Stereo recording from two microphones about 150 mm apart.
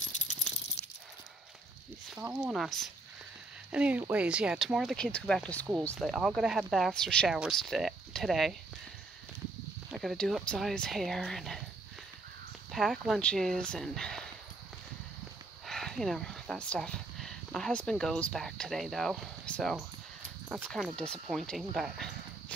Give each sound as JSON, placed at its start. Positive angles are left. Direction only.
{"t": 0.1, "sound": "a sound", "side_deg": 55}
{"t": 0.8, "sound": "dog", "side_deg": 45}
{"t": 2.1, "sound": "speech", "side_deg": -5}
{"t": 9.8, "sound": "speech", "side_deg": 0}
{"t": 12.7, "sound": "speech", "side_deg": 0}
{"t": 15.6, "sound": "speech", "side_deg": 0}